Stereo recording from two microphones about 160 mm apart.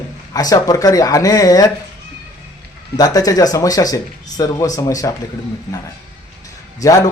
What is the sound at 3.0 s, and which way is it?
A man's voice, 25° left (ahead or behind).